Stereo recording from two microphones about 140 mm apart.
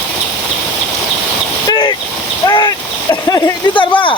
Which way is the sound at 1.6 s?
30° left (ahead or behind).